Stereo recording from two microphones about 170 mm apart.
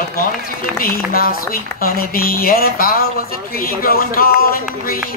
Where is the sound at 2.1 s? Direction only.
60° left (ahead or behind).